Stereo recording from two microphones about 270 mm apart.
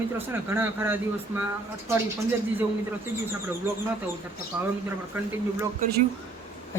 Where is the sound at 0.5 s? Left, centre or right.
Centre.